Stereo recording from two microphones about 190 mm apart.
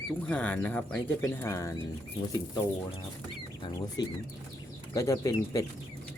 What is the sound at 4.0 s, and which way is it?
Speech, 20° left (ahead or behind).